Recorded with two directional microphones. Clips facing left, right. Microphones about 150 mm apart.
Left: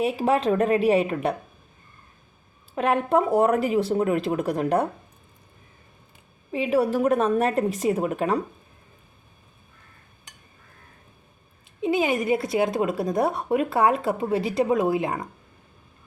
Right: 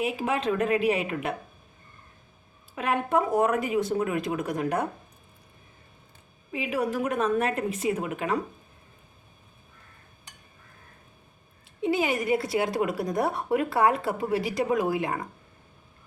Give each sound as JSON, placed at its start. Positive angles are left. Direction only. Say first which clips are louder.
{"t": 0.0, "sound": "speech", "louder": "left 5 dB", "side_deg": 35}
{"t": 2.7, "sound": "speech", "louder": "left 4 dB", "side_deg": 40}
{"t": 6.5, "sound": "speech", "louder": "left 6 dB", "side_deg": 35}
{"t": 11.6, "sound": "a woman's voice", "louder": "left 3 dB", "side_deg": 20}